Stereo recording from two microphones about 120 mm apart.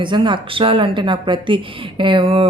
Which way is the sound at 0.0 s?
40° right (ahead or behind).